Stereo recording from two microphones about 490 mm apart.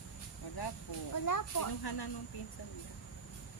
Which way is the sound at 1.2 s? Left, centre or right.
Left.